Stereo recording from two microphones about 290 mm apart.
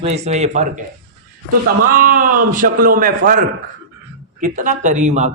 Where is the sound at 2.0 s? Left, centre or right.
Right.